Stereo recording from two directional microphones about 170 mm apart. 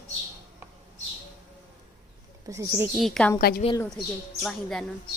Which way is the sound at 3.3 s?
65° left (ahead or behind).